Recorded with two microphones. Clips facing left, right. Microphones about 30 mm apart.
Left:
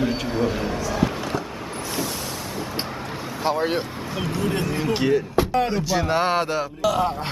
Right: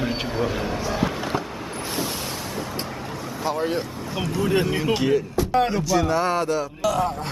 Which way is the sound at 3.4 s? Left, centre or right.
Left.